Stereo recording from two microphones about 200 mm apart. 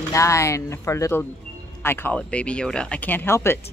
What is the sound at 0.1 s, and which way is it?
A woman's voice, 15° left (ahead or behind).